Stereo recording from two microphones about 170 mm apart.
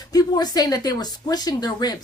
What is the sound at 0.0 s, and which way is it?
Speech, 20° left (ahead or behind).